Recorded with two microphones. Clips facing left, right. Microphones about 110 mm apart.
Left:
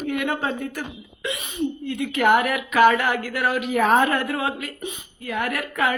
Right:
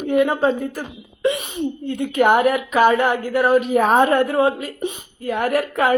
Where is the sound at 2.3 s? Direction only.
25° right (ahead or behind).